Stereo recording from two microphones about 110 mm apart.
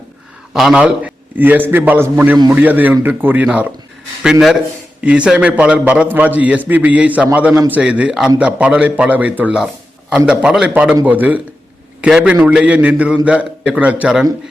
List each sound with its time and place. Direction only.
0.5 s a man's voice: 5° right (ahead or behind)